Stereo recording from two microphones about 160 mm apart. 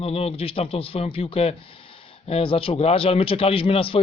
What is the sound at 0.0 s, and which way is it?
Speech, 40° left (ahead or behind).